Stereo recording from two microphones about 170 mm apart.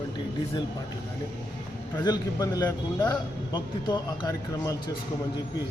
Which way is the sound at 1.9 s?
20° left (ahead or behind).